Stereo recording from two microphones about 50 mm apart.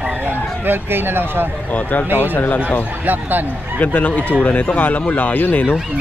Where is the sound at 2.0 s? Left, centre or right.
Right.